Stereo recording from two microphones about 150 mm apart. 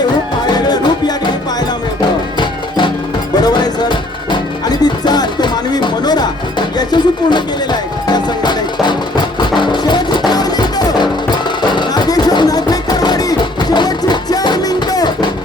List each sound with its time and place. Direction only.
0.5 s music: 25° left (ahead or behind)
2.4 s music: 30° left (ahead or behind)